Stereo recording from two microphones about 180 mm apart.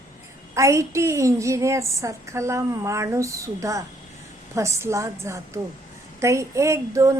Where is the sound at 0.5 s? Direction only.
15° right (ahead or behind).